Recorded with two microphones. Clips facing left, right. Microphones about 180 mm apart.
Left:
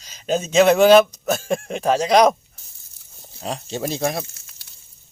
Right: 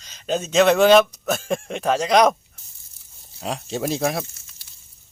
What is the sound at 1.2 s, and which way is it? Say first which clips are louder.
Speech: left 2 dB; centre (ahead or behind).